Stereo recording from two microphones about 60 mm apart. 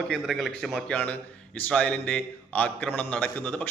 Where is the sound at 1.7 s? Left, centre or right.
Left.